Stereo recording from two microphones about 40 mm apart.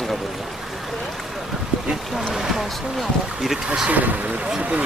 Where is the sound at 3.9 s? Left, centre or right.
Right.